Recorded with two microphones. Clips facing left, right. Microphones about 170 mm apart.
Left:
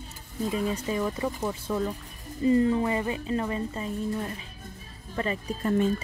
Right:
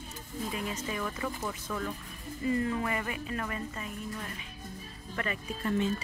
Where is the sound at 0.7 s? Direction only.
35° left (ahead or behind).